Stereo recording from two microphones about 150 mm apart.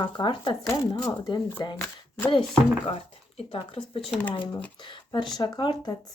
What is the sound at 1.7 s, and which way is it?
Speech, 10° left (ahead or behind).